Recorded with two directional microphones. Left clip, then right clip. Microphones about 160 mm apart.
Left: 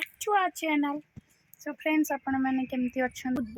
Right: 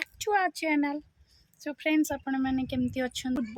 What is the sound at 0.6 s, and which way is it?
Speech, centre (ahead or behind).